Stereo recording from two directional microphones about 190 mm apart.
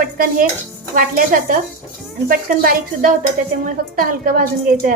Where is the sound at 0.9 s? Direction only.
45° right (ahead or behind).